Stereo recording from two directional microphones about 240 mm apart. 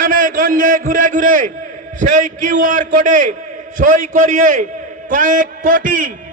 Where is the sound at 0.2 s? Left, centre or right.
Right.